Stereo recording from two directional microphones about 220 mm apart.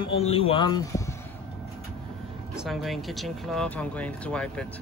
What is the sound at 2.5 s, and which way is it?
Speech, centre (ahead or behind).